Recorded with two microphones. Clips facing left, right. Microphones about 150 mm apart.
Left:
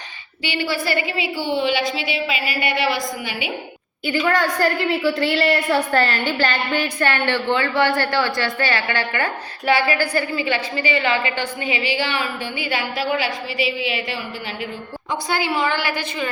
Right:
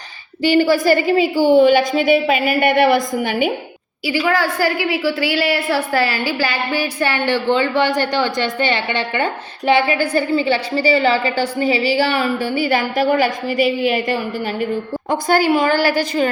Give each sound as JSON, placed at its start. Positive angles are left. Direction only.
{"t": 0.4, "sound": "a woman's voice", "side_deg": -40}
{"t": 4.0, "sound": "a woman's voice", "side_deg": -5}